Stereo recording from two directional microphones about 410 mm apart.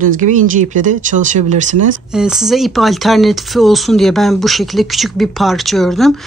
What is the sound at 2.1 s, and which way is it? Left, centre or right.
Speech, centre.